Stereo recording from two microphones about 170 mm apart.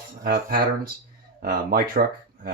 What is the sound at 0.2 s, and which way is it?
Speech, 60° right (ahead or behind).